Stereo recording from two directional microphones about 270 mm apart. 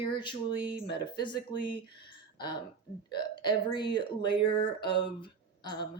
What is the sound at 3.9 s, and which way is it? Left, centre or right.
Speech, centre.